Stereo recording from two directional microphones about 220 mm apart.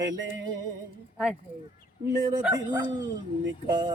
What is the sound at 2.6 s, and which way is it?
Speech, 20° right (ahead or behind).